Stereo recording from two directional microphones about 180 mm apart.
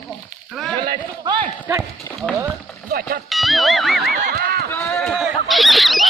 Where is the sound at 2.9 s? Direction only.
55° right (ahead or behind).